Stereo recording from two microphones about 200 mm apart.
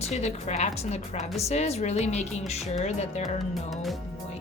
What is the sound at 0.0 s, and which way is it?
A woman's voice, 35° left (ahead or behind).